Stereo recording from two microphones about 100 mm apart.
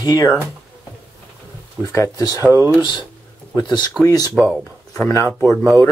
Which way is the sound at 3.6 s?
45° left (ahead or behind).